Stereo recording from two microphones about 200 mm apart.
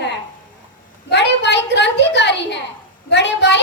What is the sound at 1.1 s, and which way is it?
A woman's voice, 60° left (ahead or behind).